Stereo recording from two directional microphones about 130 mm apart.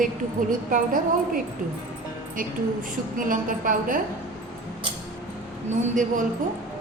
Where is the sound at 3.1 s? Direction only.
90° right.